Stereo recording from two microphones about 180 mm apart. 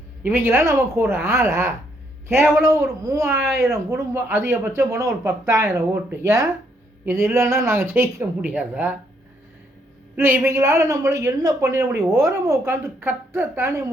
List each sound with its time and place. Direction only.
0.2 s a woman's voice: 10° right (ahead or behind)
10.2 s a woman's voice: 15° right (ahead or behind)